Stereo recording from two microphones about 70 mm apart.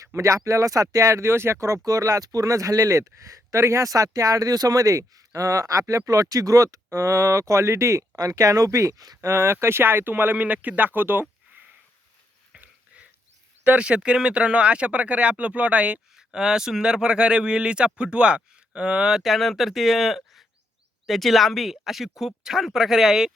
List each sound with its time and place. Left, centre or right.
0.0 s speech: right
9.2 s speech: right
12.5 s a sound: centre
13.7 s speech: centre
16.1 s speech: centre